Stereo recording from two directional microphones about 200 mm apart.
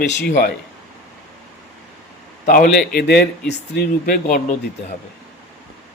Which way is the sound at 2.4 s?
40° left (ahead or behind).